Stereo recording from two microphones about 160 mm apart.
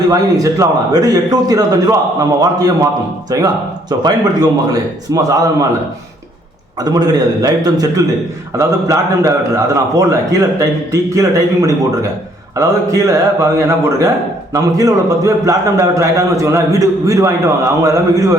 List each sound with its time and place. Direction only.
0.1 s a man's voice: 20° right (ahead or behind)
6.7 s a man's voice: 25° right (ahead or behind)